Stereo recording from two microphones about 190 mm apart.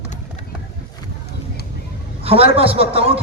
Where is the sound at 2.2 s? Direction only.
30° right (ahead or behind).